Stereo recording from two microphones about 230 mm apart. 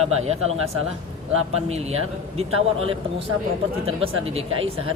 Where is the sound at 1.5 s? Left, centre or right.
Right.